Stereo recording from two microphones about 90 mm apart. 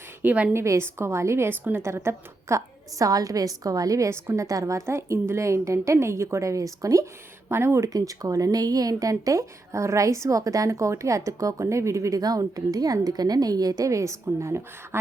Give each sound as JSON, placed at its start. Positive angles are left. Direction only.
{"t": 0.2, "sound": "a woman's voice", "side_deg": -20}
{"t": 0.5, "sound": "a woman's voice", "side_deg": -30}